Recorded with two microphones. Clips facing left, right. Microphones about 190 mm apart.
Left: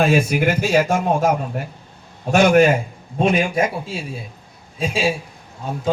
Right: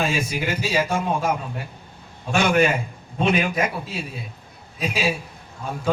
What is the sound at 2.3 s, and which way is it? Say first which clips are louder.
A man's voice: left 6 dB; 40° left (ahead or behind).